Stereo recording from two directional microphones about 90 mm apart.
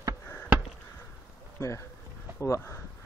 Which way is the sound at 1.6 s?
30° left (ahead or behind).